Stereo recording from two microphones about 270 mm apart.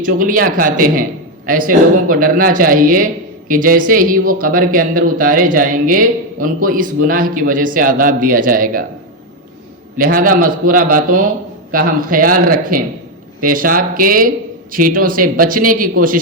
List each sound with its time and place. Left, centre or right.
0.0 s a man's voice: right
10.0 s a man's voice: right